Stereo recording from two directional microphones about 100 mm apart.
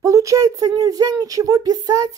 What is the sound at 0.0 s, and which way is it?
A woman's voice, 30° right (ahead or behind).